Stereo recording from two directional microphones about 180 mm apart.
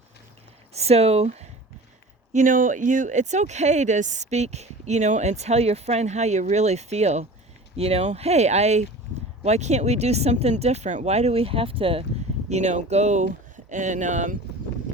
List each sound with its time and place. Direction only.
0.7 s speech: 35° right (ahead or behind)
2.3 s speech: 45° right (ahead or behind)